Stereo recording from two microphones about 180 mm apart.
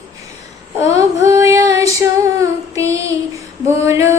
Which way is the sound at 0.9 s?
15° right (ahead or behind).